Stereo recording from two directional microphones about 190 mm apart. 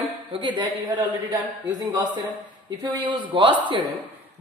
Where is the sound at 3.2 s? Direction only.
25° right (ahead or behind).